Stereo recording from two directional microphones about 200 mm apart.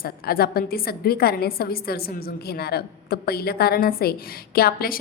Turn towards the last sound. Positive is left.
turn(degrees=50)  # may be behind; listen again after turning